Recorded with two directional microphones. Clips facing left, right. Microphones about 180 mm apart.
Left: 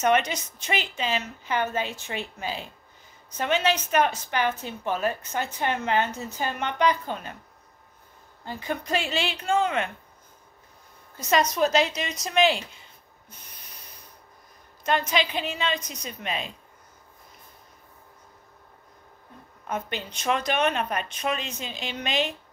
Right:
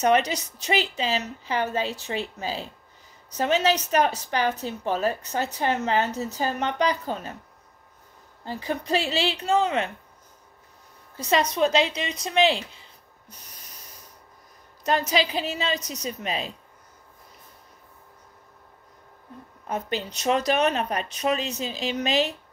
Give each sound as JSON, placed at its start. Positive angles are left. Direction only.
{"t": 0.0, "sound": "a woman's voice", "side_deg": -35}
{"t": 8.5, "sound": "a woman's voice", "side_deg": -35}
{"t": 11.1, "sound": "a woman's voice", "side_deg": -30}
{"t": 13.3, "sound": "snort", "side_deg": -40}
{"t": 14.9, "sound": "a woman's voice", "side_deg": -40}
{"t": 19.7, "sound": "a woman's voice", "side_deg": -35}